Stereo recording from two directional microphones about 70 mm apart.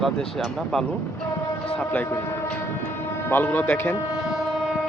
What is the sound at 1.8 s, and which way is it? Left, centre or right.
Speech, left.